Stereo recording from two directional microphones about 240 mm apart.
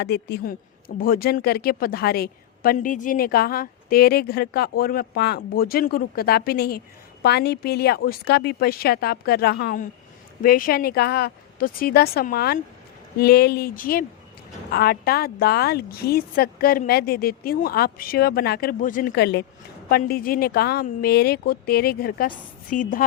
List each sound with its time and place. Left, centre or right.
0.0 s a woman's voice: left